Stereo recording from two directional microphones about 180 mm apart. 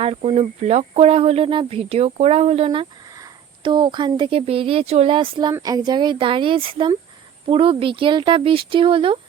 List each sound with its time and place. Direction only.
0.0 s speech: 35° right (ahead or behind)